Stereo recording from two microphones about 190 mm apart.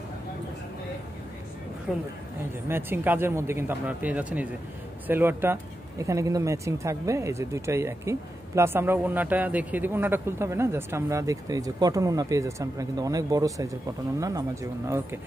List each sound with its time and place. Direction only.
1.9 s a woman's voice: 5° right (ahead or behind)